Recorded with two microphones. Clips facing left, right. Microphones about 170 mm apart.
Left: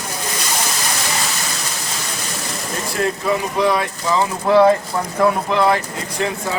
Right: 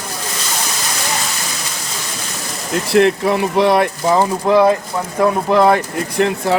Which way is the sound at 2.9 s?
75° right (ahead or behind).